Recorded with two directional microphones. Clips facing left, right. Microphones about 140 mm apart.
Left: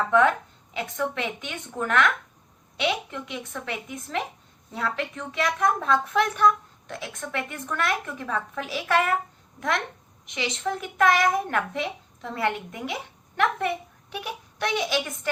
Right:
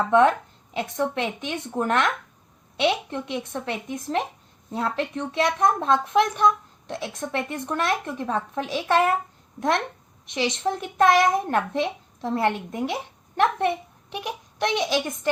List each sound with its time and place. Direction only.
0.1 s a child's voice: 30° right (ahead or behind)